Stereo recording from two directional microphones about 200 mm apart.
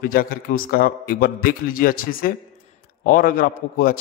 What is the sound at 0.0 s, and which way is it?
A man's voice, 45° left (ahead or behind).